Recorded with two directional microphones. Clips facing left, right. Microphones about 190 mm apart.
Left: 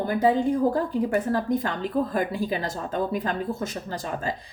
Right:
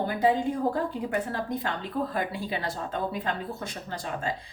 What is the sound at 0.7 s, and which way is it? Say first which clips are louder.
Speech: left 5 dB; 45° left (ahead or behind).